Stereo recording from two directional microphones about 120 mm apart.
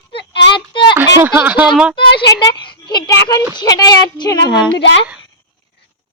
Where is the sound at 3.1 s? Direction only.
30° left (ahead or behind).